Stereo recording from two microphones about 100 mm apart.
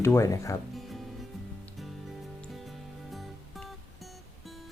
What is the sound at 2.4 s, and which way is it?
Music, centre (ahead or behind).